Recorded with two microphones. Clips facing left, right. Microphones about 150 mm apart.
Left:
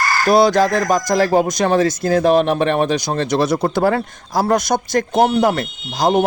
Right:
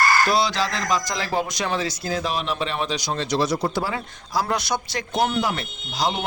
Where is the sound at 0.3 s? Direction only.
50° left (ahead or behind).